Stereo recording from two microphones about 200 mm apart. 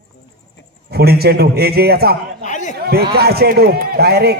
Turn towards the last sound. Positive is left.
turn(degrees=-50)  # may be behind; listen again after turning